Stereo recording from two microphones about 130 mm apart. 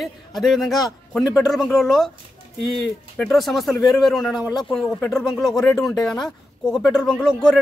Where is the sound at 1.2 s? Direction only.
25° left (ahead or behind).